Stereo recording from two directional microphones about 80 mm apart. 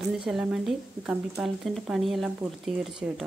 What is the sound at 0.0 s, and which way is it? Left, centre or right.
A woman's voice, centre.